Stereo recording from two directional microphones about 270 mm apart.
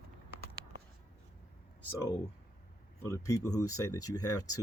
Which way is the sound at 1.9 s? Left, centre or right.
Centre.